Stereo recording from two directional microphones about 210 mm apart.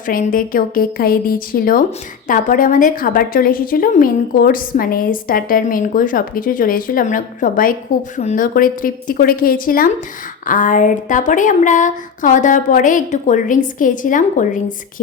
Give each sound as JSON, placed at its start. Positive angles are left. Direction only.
{"t": 0.1, "sound": "a woman's voice", "side_deg": 40}